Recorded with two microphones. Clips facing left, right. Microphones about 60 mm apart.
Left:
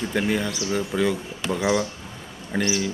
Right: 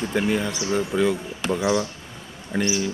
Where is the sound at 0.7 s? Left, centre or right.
Centre.